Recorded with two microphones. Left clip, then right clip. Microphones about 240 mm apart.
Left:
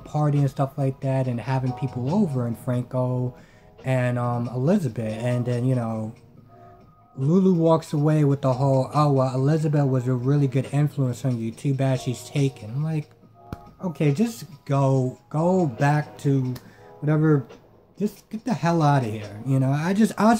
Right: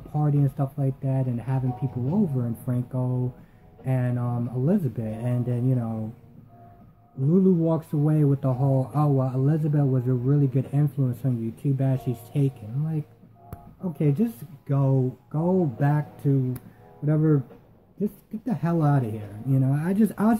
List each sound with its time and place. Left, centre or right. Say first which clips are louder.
0.1 s a man's voice: left 3 dB; centre
7.2 s a man's voice: left 3 dB; centre